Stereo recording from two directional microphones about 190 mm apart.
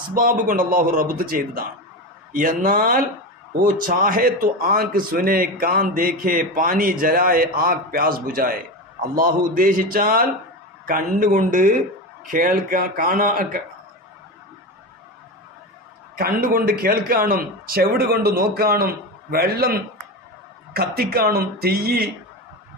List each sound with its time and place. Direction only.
0.1 s a man's voice: 45° right (ahead or behind)
16.2 s a man's voice: 50° right (ahead or behind)